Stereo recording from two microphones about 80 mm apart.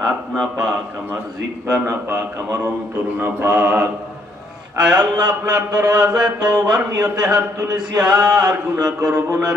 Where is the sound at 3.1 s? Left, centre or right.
Right.